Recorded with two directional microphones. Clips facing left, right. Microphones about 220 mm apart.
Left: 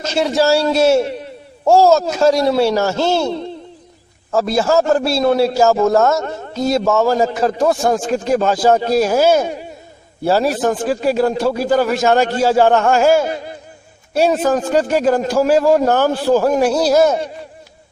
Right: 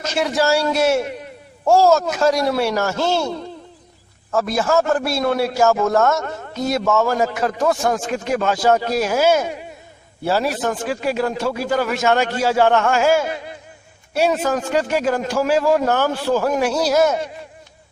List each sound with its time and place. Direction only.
0.0 s a man's voice: 30° left (ahead or behind)